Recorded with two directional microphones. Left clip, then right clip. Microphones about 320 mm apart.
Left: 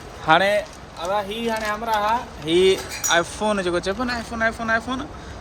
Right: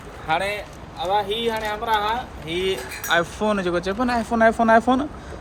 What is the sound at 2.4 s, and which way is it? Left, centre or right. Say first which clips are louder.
Speech: left 8 dB; left.